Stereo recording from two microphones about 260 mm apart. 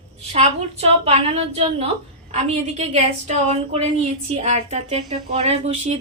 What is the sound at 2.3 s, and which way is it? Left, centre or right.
A woman's voice, right.